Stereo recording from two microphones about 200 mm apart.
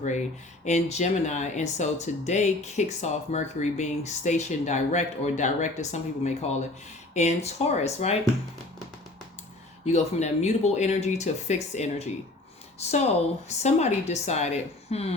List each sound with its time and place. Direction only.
0.0 s speech: 35° left (ahead or behind)
9.8 s speech: 35° left (ahead or behind)